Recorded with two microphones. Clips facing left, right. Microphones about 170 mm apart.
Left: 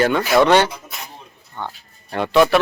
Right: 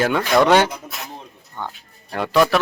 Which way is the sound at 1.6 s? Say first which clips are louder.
Left 1 dB; 10° right (ahead or behind).